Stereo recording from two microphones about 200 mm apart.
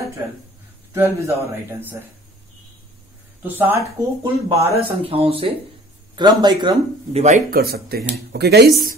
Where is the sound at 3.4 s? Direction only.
10° right (ahead or behind).